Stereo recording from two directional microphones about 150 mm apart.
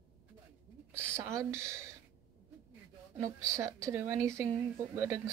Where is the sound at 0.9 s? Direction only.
20° right (ahead or behind).